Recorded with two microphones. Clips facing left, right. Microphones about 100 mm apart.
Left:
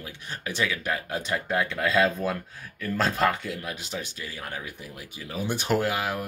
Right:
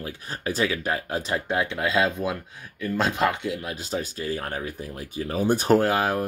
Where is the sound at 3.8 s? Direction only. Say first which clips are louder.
Right 6 dB; 40° right (ahead or behind).